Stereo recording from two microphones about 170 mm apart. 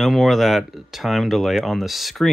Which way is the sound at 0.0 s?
Centre (ahead or behind).